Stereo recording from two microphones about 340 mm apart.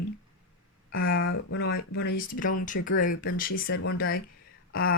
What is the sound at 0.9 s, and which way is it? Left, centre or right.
Speech, left.